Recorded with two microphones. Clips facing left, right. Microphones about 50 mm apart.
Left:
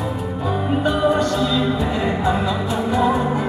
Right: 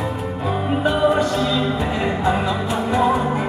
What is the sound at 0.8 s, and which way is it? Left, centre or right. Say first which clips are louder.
Music: right 1 dB; centre.